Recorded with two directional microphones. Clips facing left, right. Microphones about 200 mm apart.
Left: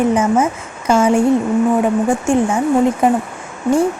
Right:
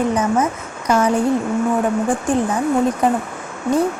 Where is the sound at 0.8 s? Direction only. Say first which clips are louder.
Left 3 dB; 25° left (ahead or behind).